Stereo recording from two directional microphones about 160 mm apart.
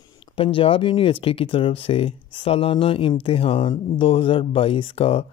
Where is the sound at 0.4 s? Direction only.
35° left (ahead or behind).